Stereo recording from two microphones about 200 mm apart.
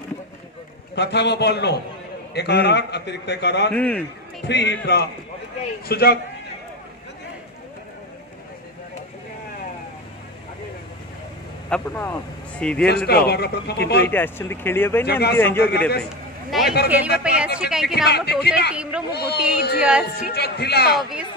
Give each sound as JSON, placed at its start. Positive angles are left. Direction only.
{"t": 0.9, "sound": "a man's voice", "side_deg": 60}
{"t": 3.7, "sound": "speech", "side_deg": 5}
{"t": 4.5, "sound": "a man's voice", "side_deg": 60}
{"t": 11.7, "sound": "speech", "side_deg": 5}
{"t": 12.8, "sound": "a man's voice", "side_deg": 55}
{"t": 14.0, "sound": "speech", "side_deg": 10}
{"t": 15.0, "sound": "speech", "side_deg": 55}
{"t": 15.3, "sound": "speech", "side_deg": 10}
{"t": 16.0, "sound": "a woman's voice", "side_deg": 0}
{"t": 18.0, "sound": "a man's voice", "side_deg": 55}
{"t": 18.7, "sound": "a woman's voice", "side_deg": -5}
{"t": 19.1, "sound": "speech", "side_deg": 55}
{"t": 19.8, "sound": "a woman's voice", "side_deg": -5}
{"t": 20.2, "sound": "speech", "side_deg": 55}